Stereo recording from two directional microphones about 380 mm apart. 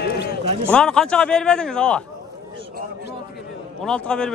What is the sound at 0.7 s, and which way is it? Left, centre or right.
A man's voice, centre.